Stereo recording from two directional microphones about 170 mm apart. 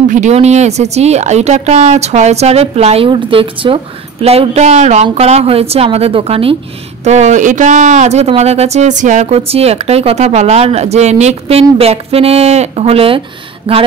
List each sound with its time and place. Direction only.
0.1 s a woman's voice: 40° right (ahead or behind)